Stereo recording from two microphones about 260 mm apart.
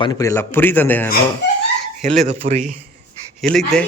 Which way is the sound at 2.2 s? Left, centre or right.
Right.